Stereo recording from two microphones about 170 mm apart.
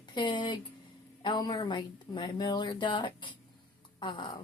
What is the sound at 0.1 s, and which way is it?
A woman's voice, 25° left (ahead or behind).